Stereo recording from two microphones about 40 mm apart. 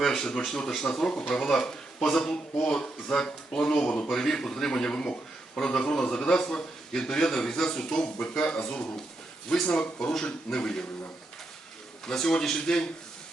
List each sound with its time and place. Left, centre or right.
0.0 s a man's voice: centre
4.1 s a man's voice: centre
8.6 s a man's voice: centre
9.6 s a man's voice: left
12.0 s a man's voice: centre